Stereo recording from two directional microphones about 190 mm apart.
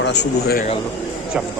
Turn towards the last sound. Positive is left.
turn(degrees=60)  # may be behind; listen again after turning